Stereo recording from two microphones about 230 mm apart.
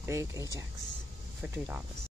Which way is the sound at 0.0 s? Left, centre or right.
Centre.